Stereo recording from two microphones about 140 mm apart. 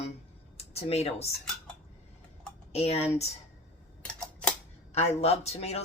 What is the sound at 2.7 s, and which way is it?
Speech, 45° left (ahead or behind).